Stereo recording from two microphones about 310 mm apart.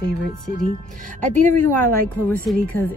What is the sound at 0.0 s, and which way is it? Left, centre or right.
Speech, left.